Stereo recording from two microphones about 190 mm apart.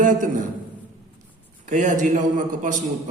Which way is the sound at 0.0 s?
45° right (ahead or behind).